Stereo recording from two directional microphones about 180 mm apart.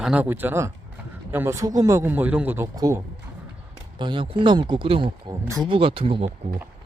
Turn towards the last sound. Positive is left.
turn(degrees=-30)  # may be behind; listen again after turning